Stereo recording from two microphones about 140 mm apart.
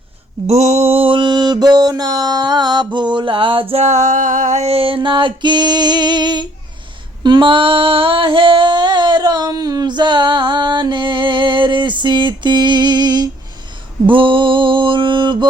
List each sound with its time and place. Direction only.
0.4 s mantra: 55° right (ahead or behind); by 6.5 s 30° right (ahead or behind)
7.2 s a sound: 35° right (ahead or behind)
14.1 s music: 35° right (ahead or behind)